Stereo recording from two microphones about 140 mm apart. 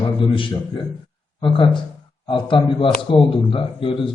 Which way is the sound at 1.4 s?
35° left (ahead or behind).